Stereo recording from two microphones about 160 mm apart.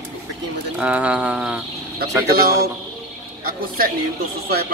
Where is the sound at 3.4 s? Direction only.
60° right (ahead or behind).